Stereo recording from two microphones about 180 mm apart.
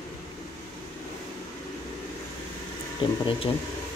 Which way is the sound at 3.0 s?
25° left (ahead or behind).